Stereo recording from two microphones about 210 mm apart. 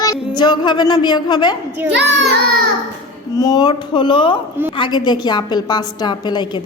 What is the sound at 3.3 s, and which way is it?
A woman's voice, 20° left (ahead or behind).